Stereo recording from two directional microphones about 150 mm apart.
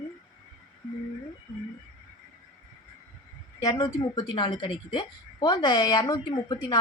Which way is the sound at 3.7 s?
30° left (ahead or behind).